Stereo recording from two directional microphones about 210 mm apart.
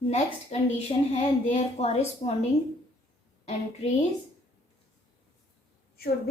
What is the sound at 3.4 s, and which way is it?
Speech, 30° left (ahead or behind).